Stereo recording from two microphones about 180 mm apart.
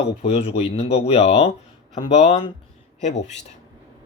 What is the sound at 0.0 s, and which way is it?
Speech, 35° left (ahead or behind).